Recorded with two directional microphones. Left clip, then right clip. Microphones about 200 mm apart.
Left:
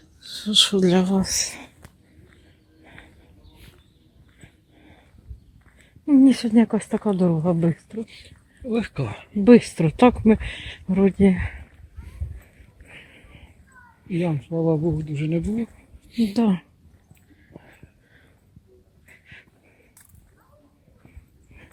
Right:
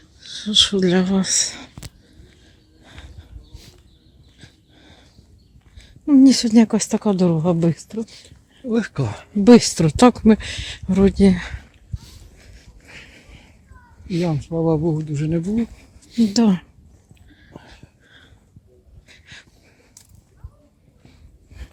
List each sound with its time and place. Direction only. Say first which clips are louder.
0.2 s speech: right 2 dB; 5° left (ahead or behind)
2.8 s a sound: right 2 dB; 10° right (ahead or behind)
4.4 s dog: right 5 dB; 5° right (ahead or behind)
6.1 s a sound: right 3 dB; 5° right (ahead or behind)
6.3 s speech: right 4 dB; 20° right (ahead or behind)
8.7 s speech: right 3 dB; 40° right (ahead or behind)
9.4 s speech: right 3 dB; 20° right (ahead or behind)
12.9 s a sound: right 4 dB; 15° right (ahead or behind)
14.1 s speech: right 3 dB; 15° right (ahead or behind)
14.4 s speech: right 3 dB; 35° right (ahead or behind)
15.5 s speech: right 5 dB; 20° right (ahead or behind)